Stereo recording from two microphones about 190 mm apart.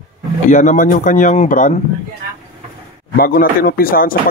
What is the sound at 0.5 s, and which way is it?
Speech, 40° left (ahead or behind).